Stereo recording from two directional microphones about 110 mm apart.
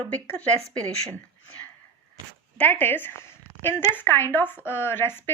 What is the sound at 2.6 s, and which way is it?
Speech, 15° left (ahead or behind).